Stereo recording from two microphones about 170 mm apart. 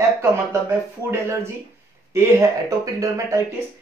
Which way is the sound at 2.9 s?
15° right (ahead or behind).